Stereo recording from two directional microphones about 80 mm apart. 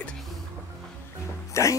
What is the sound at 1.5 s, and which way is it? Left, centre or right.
Speech, left.